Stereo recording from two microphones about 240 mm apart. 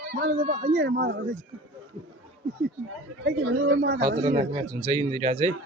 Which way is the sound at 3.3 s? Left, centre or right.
Right.